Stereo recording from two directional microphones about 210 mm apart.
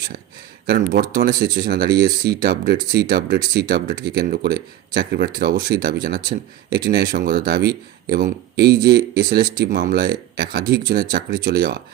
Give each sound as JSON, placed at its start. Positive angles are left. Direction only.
{"t": 1.1, "sound": "speech", "side_deg": -45}